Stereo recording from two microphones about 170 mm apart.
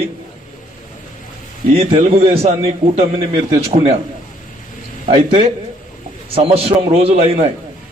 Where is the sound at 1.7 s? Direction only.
35° right (ahead or behind).